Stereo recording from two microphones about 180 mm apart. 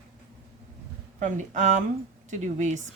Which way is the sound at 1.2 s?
45° right (ahead or behind).